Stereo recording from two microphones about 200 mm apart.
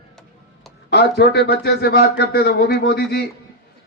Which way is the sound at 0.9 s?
55° left (ahead or behind).